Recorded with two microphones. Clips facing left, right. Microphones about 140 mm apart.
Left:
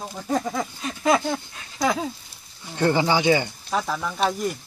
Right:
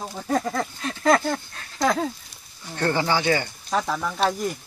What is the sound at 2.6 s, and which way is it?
Speech, 15° left (ahead or behind).